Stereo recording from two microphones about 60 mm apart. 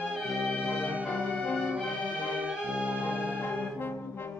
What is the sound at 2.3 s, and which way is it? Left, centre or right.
Music, right.